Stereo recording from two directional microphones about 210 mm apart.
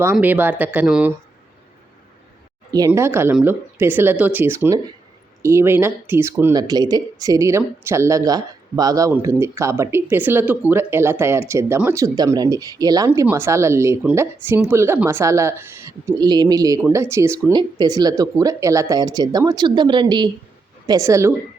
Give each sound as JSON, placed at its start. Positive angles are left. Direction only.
{"t": 0.0, "sound": "speech", "side_deg": -10}
{"t": 2.7, "sound": "speech", "side_deg": -15}